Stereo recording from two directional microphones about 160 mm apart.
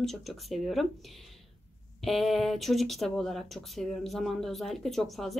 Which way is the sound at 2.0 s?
Centre (ahead or behind).